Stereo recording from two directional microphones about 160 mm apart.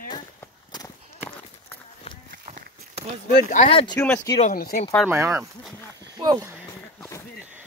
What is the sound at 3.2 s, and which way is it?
Speech, 65° left (ahead or behind).